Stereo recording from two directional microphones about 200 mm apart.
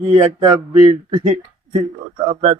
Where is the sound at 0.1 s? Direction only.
20° right (ahead or behind).